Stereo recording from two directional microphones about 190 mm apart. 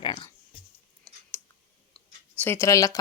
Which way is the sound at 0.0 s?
25° left (ahead or behind).